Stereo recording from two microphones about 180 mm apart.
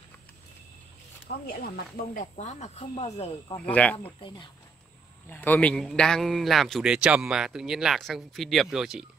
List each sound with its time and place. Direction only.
1.2 s speech: 60° left (ahead or behind); by 3.5 s 35° left (ahead or behind)
3.5 s speech: 5° left (ahead or behind)
4.2 s speech: 25° left (ahead or behind)
5.3 s a man's voice: 10° left (ahead or behind)